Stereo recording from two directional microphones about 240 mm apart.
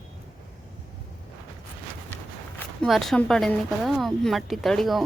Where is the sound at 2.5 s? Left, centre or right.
Centre.